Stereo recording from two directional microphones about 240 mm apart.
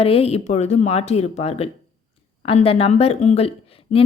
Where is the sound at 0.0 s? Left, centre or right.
Left.